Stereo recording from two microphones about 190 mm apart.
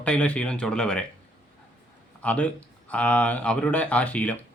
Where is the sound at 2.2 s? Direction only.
5° left (ahead or behind).